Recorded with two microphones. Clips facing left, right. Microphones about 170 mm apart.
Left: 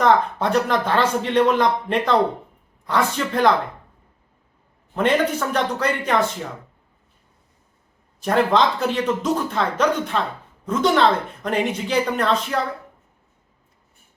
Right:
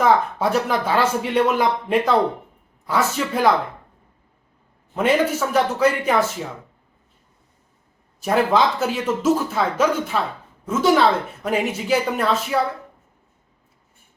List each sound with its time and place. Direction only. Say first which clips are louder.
0.0 s speech: even; 5° right (ahead or behind)
4.9 s speech: right 1 dB; 5° right (ahead or behind)
8.2 s speech: even; 5° right (ahead or behind)